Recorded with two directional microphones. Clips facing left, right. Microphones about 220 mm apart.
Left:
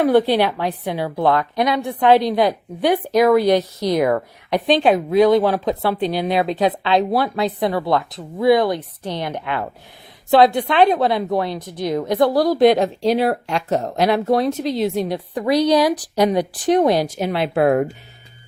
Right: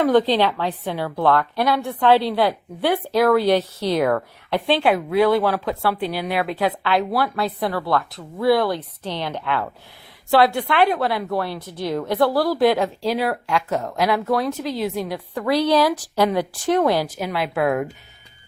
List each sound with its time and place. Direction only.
0.0 s a woman's voice: 10° left (ahead or behind); by 17.8 s 35° left (ahead or behind)